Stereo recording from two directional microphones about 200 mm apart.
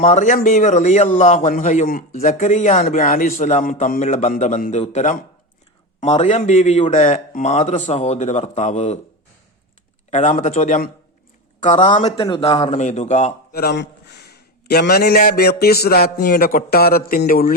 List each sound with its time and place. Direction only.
0.0 s a man's voice: 35° left (ahead or behind)
10.1 s a man's voice: 40° left (ahead or behind); by 12.6 s 20° left (ahead or behind)
12.6 s a man's voice: 35° left (ahead or behind)
13.5 s a man's voice: 50° left (ahead or behind)